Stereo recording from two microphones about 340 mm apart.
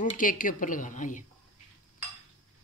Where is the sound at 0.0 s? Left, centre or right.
Left.